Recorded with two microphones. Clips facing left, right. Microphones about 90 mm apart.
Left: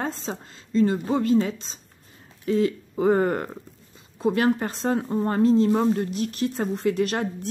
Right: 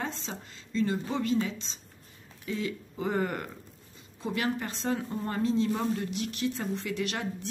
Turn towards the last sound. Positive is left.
turn(degrees=45)  # may be behind; listen again after turning